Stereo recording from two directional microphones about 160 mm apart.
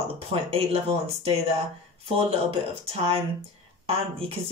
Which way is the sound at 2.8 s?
40° right (ahead or behind).